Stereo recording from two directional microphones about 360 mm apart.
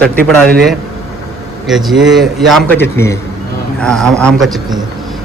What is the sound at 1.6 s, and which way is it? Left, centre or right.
A man's voice, centre.